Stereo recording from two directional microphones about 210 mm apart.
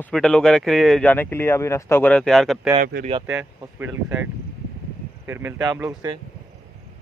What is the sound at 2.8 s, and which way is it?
Speech, 40° right (ahead or behind).